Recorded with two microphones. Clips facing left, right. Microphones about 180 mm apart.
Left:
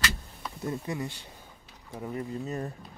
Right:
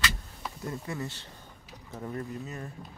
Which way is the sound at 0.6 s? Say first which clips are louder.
Left 3 dB; 15° left (ahead or behind).